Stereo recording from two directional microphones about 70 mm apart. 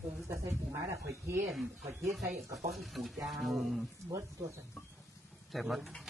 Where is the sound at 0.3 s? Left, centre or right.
Right.